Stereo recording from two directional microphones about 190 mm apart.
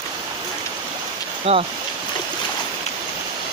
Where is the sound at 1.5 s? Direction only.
30° right (ahead or behind).